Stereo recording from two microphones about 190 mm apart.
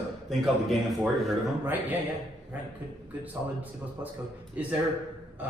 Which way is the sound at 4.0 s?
10° right (ahead or behind).